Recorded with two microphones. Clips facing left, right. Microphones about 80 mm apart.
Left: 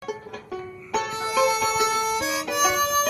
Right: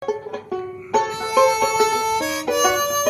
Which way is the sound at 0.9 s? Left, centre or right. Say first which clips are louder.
Right 6 dB; right.